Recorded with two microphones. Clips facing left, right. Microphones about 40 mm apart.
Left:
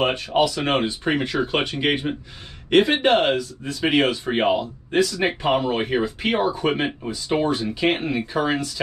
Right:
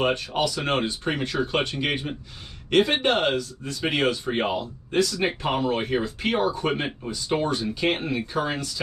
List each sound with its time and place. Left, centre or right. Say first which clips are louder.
0.0 s speech: left 4 dB; centre